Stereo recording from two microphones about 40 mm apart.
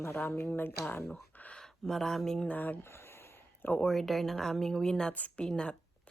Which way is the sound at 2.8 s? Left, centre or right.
Left.